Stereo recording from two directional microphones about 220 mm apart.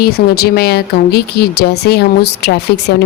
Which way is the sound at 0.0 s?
45° left (ahead or behind).